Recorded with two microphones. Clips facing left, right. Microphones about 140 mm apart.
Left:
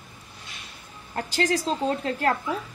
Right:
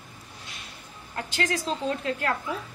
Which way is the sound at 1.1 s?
35° left (ahead or behind).